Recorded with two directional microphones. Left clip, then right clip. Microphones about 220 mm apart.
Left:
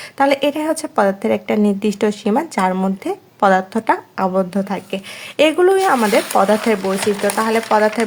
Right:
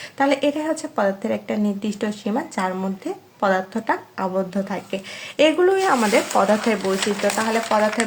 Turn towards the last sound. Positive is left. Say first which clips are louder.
# left 5 dB
turn(degrees=35)  # may be behind; listen again after turning